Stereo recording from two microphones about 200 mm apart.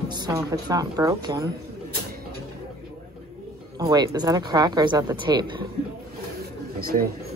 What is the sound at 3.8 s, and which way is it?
Speech, 20° right (ahead or behind).